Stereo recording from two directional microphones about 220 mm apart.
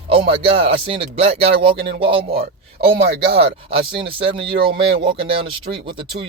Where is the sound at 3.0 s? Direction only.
45° right (ahead or behind).